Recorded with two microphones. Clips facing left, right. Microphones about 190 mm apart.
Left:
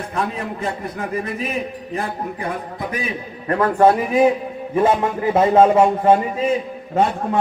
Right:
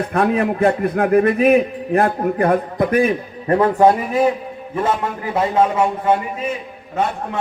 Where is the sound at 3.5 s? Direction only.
20° right (ahead or behind).